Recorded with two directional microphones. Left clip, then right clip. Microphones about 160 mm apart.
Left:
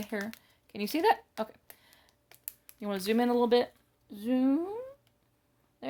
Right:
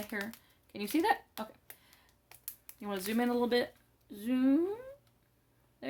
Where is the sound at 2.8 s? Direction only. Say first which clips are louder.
Left 5 dB; 45° left (ahead or behind).